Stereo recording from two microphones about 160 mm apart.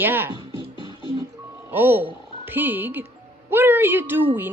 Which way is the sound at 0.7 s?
30° left (ahead or behind).